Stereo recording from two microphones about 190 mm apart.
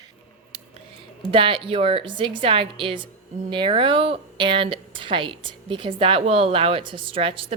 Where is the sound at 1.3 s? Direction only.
30° right (ahead or behind).